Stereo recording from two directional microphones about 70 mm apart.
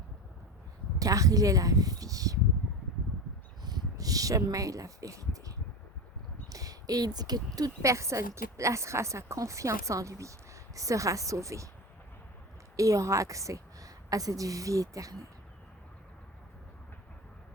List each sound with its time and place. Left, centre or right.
0.9 s speech: right
3.6 s a sound: right
6.5 s speech: right
7.8 s a woman's voice: right
12.7 s a woman's voice: right